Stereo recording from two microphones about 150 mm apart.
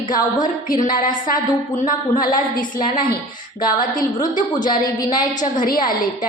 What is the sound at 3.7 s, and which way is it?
A woman's voice, 60° left (ahead or behind).